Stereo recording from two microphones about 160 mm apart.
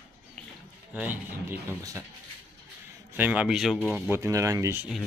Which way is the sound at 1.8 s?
20° right (ahead or behind).